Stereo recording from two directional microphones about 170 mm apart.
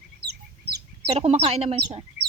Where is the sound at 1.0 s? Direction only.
35° right (ahead or behind).